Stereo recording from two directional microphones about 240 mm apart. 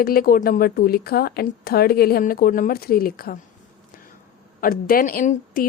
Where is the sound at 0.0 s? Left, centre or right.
Left.